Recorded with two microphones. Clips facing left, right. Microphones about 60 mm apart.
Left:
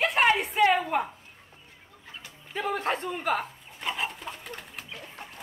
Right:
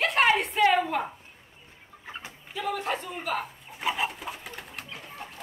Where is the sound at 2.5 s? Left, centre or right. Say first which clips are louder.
Left 1 dB; left.